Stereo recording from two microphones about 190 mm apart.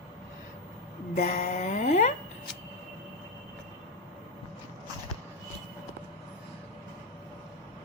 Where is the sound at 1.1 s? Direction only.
45° left (ahead or behind).